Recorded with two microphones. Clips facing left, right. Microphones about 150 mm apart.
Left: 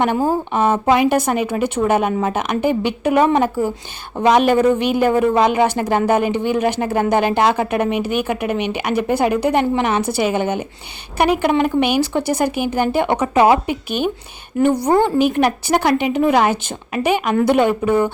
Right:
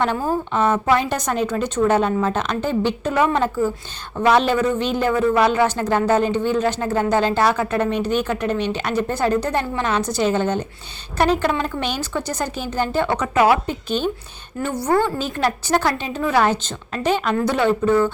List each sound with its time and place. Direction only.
0.5 s a woman's voice: 20° left (ahead or behind)
4.2 s a woman's voice: 15° left (ahead or behind)
13.1 s speech: 25° left (ahead or behind)
13.7 s a woman's voice: 10° left (ahead or behind)